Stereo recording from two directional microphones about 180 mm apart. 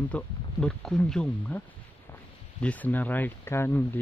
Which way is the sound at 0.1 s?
5° left (ahead or behind).